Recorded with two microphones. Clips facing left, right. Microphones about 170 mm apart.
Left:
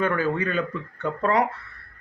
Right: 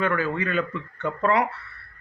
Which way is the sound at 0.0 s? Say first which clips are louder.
Left 1 dB; 35° left (ahead or behind).